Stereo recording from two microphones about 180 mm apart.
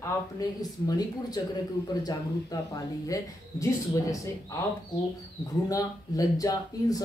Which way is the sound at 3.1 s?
20° left (ahead or behind).